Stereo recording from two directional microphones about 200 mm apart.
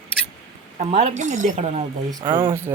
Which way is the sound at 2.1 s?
20° right (ahead or behind).